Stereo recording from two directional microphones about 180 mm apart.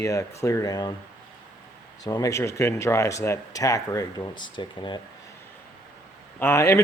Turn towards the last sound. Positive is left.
turn(degrees=15)  # may be behind; listen again after turning